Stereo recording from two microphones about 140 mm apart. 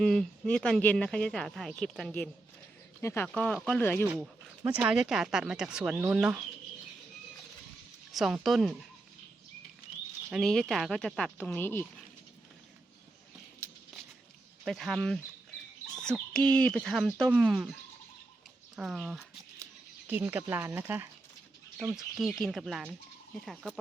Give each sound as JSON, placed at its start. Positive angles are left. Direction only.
{"t": 0.0, "sound": "speech", "side_deg": 5}
{"t": 3.0, "sound": "speech", "side_deg": 20}
{"t": 3.2, "sound": "speech", "side_deg": 5}
{"t": 4.0, "sound": "speech", "side_deg": -10}
{"t": 8.1, "sound": "speech", "side_deg": 0}
{"t": 10.3, "sound": "speech", "side_deg": 5}
{"t": 14.7, "sound": "speech", "side_deg": 0}
{"t": 18.8, "sound": "speech", "side_deg": 0}
{"t": 20.1, "sound": "speech", "side_deg": -15}
{"t": 21.9, "sound": "speech", "side_deg": 0}